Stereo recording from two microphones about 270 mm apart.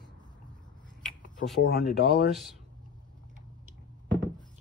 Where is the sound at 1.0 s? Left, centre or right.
Centre.